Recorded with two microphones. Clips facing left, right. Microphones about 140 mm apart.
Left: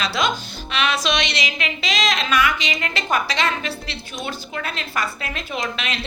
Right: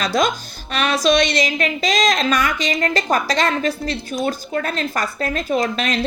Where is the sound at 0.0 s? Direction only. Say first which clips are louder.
Right 4 dB; 40° right (ahead or behind).